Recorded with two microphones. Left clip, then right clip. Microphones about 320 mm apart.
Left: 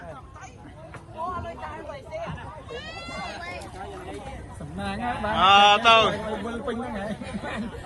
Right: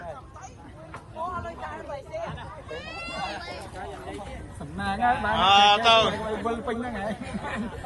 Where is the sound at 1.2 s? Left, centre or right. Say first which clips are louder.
Left 1 dB; centre.